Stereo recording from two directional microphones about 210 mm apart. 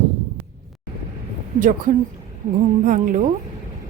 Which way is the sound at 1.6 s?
40° right (ahead or behind).